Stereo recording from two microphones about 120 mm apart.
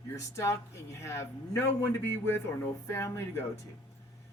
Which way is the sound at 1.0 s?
25° left (ahead or behind).